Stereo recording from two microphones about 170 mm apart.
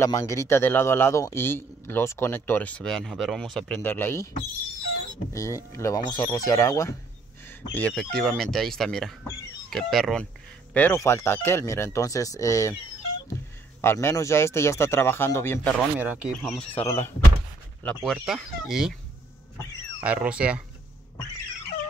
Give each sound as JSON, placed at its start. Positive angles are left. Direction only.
{"t": 0.0, "sound": "a man's voice", "side_deg": 15}
{"t": 5.3, "sound": "a man's voice", "side_deg": 20}
{"t": 7.7, "sound": "speech", "side_deg": 5}
{"t": 10.7, "sound": "a man's voice", "side_deg": 10}
{"t": 13.7, "sound": "a man's voice", "side_deg": 15}
{"t": 16.0, "sound": "speech", "side_deg": -10}
{"t": 16.8, "sound": "a man's voice", "side_deg": 15}
{"t": 17.8, "sound": "speech", "side_deg": 0}
{"t": 20.0, "sound": "speech", "side_deg": -5}